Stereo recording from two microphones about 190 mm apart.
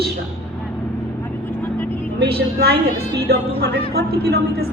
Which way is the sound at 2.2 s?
55° right (ahead or behind).